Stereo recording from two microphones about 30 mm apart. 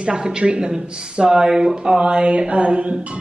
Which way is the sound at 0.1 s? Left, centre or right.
Right.